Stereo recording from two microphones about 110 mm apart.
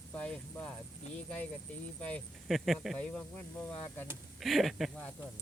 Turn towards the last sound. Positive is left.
turn(degrees=0)  # may be behind; listen again after turning